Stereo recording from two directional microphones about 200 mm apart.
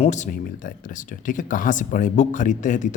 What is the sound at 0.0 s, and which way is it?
Speech, 35° left (ahead or behind).